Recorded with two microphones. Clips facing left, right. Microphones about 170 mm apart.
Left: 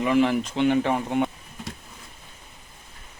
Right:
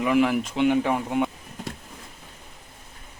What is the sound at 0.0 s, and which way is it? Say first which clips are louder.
Speech: even; 5° right (ahead or behind).